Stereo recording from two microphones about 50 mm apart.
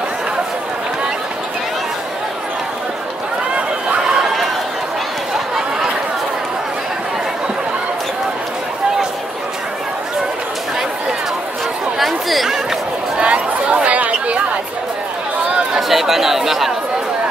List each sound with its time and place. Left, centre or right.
12.0 s chatter: centre
13.2 s chatter: right
15.9 s chatter: centre